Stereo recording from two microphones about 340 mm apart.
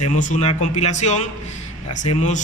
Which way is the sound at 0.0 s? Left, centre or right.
Left.